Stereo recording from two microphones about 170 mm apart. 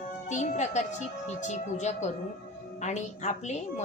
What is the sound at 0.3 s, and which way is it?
A woman's voice, 45° left (ahead or behind).